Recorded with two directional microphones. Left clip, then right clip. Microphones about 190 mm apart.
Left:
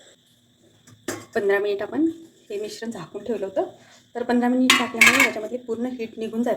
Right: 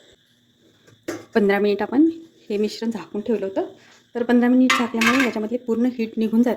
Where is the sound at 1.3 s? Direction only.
45° right (ahead or behind).